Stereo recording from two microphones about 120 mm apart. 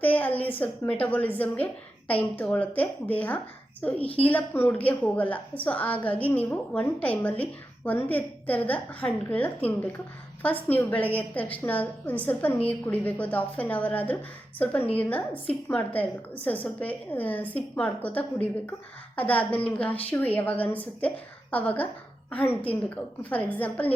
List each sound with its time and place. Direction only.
0.0 s a woman's voice: 15° left (ahead or behind)
4.0 s a woman's voice: 50° left (ahead or behind)
4.3 s a woman's voice: 15° left (ahead or behind)